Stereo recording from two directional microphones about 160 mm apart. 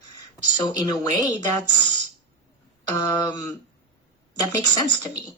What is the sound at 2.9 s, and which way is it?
Speech, 25° left (ahead or behind).